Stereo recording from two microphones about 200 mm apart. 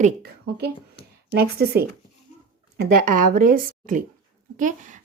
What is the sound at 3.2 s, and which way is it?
Speech, 45° right (ahead or behind).